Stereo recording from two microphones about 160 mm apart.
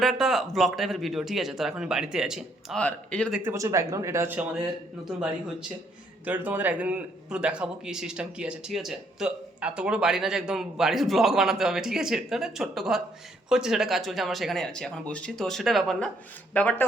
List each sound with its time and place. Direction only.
0.0 s a man's voice: centre (ahead or behind)
3.3 s speech: 15° right (ahead or behind)
6.2 s a man's voice: 10° right (ahead or behind); by 16.8 s 10° left (ahead or behind)